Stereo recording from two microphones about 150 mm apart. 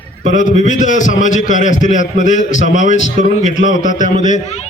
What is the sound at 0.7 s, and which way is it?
A man's voice, 55° left (ahead or behind).